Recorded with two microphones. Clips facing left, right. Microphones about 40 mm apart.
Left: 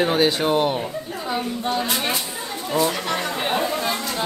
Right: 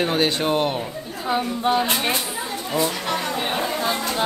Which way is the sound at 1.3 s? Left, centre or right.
Centre.